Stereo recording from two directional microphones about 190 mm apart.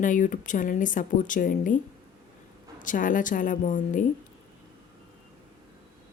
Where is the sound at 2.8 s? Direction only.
45° left (ahead or behind).